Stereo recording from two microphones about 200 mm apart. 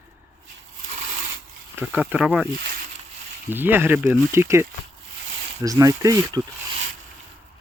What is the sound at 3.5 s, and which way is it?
Speech, 10° right (ahead or behind).